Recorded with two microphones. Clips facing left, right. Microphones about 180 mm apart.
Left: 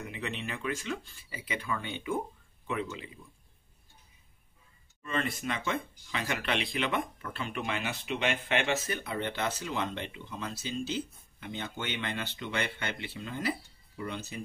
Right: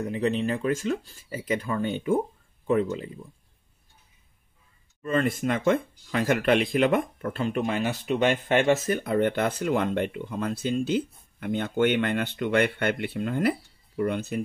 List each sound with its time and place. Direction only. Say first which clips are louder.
0.0 s speech: right 12 dB; 40° right (ahead or behind)
5.0 s speech: right 8 dB; 45° right (ahead or behind)